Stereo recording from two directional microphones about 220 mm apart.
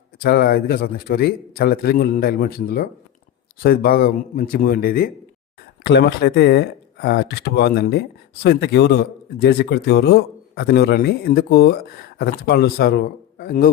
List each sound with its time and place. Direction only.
0.2 s a man's voice: 45° left (ahead or behind)